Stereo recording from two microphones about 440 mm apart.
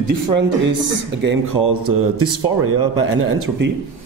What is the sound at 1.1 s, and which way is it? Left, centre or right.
Speech, right.